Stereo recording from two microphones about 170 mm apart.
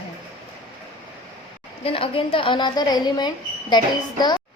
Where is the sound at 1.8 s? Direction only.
30° left (ahead or behind).